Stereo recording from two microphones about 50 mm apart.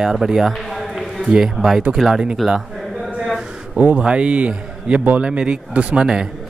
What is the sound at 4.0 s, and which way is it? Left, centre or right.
Speech, right.